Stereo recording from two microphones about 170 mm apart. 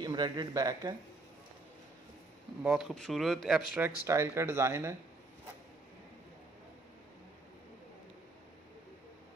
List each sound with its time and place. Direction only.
0.0 s speech: 25° right (ahead or behind)
2.6 s speech: 5° right (ahead or behind)